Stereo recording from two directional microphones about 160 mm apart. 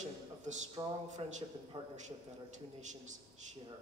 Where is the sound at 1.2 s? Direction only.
35° right (ahead or behind).